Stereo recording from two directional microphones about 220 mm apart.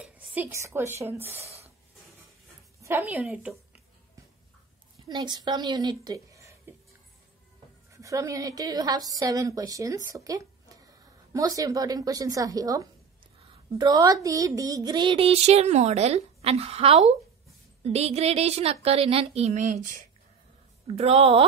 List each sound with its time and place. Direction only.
0.0 s a woman's voice: 10° right (ahead or behind)
1.3 s a sound: 30° right (ahead or behind)
2.8 s a woman's voice: 10° right (ahead or behind)
5.0 s a woman's voice: 20° right (ahead or behind)
7.9 s a woman's voice: 15° right (ahead or behind)